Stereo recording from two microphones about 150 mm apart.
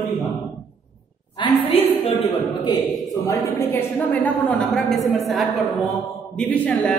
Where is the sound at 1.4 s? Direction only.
30° left (ahead or behind); by 6.9 s 10° left (ahead or behind).